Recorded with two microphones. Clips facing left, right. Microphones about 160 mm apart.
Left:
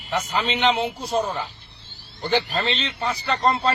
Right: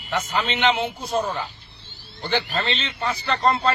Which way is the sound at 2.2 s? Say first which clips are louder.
Left 2 dB; centre (ahead or behind).